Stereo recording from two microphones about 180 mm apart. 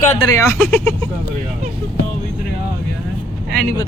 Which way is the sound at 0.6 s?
5° left (ahead or behind).